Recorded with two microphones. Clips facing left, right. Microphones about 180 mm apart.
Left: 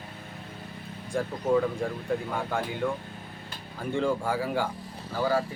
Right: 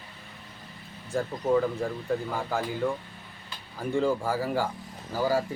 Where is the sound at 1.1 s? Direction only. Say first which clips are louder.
Even; centre (ahead or behind).